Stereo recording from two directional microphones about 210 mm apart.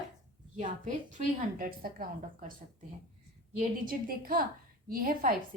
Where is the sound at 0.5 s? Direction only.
35° right (ahead or behind).